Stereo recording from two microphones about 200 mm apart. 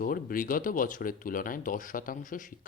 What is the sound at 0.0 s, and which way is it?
Speech, 45° left (ahead or behind).